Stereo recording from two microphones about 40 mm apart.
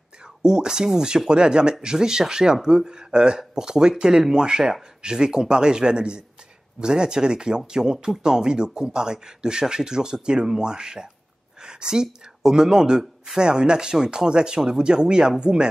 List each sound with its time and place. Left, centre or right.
0.4 s speech: centre